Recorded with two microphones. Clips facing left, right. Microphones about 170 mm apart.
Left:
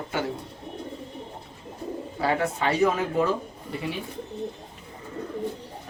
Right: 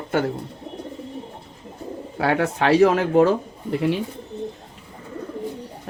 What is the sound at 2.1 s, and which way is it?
Speech, 70° right (ahead or behind).